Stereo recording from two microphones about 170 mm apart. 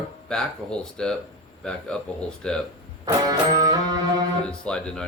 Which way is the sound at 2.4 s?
5° left (ahead or behind).